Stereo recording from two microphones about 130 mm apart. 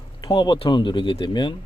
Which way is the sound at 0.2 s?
35° left (ahead or behind).